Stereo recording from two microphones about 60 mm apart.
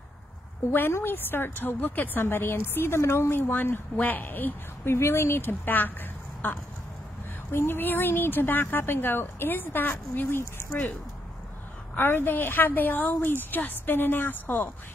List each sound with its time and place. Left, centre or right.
0.7 s a woman's voice: left
4.9 s a woman's voice: left
11.9 s a woman's voice: left